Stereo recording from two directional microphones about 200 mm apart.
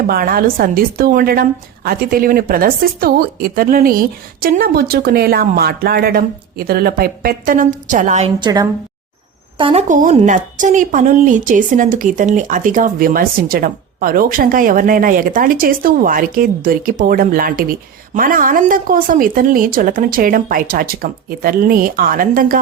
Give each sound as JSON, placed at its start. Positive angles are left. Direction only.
{"t": 0.1, "sound": "a woman's voice", "side_deg": -50}
{"t": 8.4, "sound": "a woman's voice", "side_deg": -20}
{"t": 9.9, "sound": "a woman's voice", "side_deg": -40}